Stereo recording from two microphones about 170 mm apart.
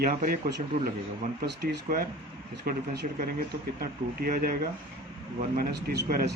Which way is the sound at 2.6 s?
75° right (ahead or behind).